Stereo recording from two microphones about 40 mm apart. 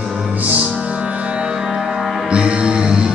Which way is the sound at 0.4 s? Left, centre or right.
Right.